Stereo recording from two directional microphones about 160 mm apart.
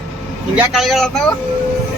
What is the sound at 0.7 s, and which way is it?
Speech, centre (ahead or behind).